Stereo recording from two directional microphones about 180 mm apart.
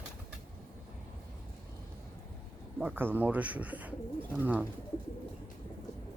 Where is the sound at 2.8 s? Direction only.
10° right (ahead or behind).